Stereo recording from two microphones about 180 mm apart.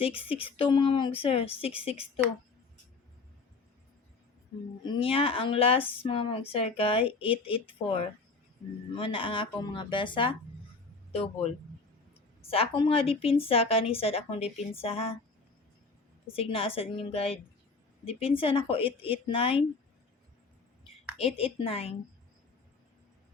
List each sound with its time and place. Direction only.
0.0 s a woman's voice: 30° left (ahead or behind)
4.8 s a woman's voice: 25° left (ahead or behind)
16.2 s a woman's voice: 30° left (ahead or behind)
21.3 s a woman's voice: 30° left (ahead or behind)